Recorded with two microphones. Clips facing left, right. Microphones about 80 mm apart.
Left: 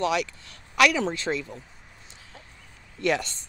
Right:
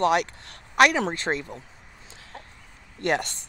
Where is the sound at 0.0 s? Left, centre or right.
Right.